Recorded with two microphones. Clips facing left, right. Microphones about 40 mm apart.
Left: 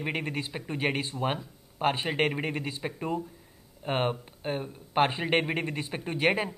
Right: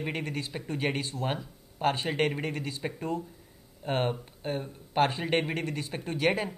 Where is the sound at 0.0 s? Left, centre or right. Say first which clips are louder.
Left 2 dB; centre.